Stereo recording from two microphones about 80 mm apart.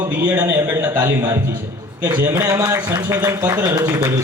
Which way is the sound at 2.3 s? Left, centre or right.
Right.